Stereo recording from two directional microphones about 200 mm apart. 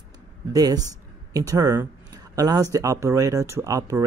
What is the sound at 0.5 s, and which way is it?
Speech, 20° right (ahead or behind).